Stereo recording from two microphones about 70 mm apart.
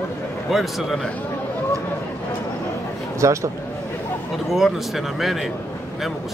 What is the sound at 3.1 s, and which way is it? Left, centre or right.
Speech, right.